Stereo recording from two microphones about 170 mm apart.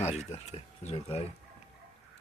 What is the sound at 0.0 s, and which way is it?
Speech, 40° left (ahead or behind).